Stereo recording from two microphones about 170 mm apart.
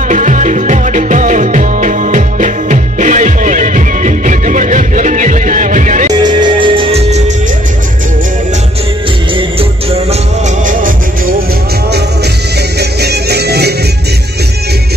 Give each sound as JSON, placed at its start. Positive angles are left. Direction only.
{"t": 0.1, "sound": "music", "side_deg": -45}
{"t": 6.2, "sound": "music", "side_deg": -30}
{"t": 9.3, "sound": "music", "side_deg": -35}
{"t": 10.6, "sound": "music", "side_deg": -50}
{"t": 13.0, "sound": "music", "side_deg": -70}